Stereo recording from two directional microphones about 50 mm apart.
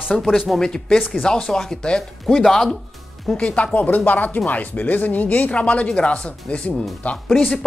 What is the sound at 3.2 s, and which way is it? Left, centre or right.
Speech, centre.